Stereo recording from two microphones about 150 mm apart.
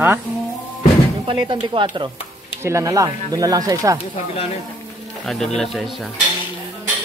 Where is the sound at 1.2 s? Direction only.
35° right (ahead or behind).